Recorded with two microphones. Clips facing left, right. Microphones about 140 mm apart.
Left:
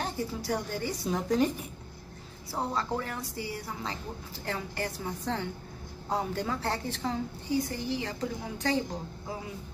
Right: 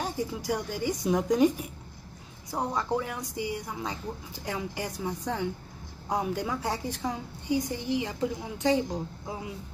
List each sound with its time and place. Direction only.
0.0 s a woman's voice: 10° right (ahead or behind)
2.5 s a woman's voice: 15° right (ahead or behind)